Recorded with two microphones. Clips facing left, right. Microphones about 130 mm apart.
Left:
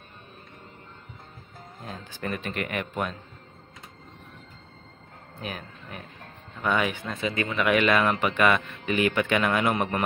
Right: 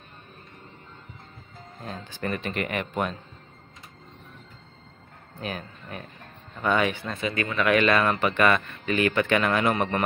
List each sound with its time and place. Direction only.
1.8 s speech: 10° left (ahead or behind)
5.4 s speech: 5° left (ahead or behind)
7.2 s speech: 20° left (ahead or behind)
7.5 s a man's voice: 10° left (ahead or behind)